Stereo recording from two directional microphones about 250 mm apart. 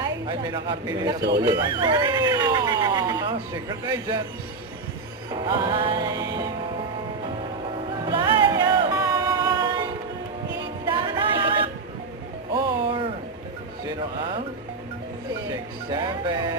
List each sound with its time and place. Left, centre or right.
0.0 s speech: centre
5.3 s music: centre
8.0 s music: centre
10.8 s a sound: centre
12.5 s music: centre
15.9 s speech: centre